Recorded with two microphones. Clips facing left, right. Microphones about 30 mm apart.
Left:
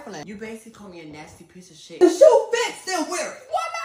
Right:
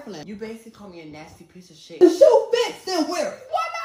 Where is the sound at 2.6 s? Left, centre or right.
Left.